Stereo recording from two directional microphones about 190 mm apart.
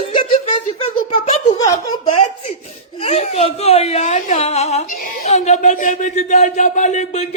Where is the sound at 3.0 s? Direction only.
35° left (ahead or behind).